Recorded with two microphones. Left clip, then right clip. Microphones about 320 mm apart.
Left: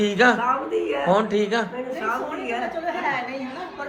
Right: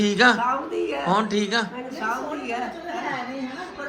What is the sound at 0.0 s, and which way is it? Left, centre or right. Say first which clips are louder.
Speech: even; centre.